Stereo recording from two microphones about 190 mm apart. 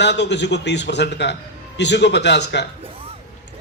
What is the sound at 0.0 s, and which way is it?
A man's voice, 65° left (ahead or behind).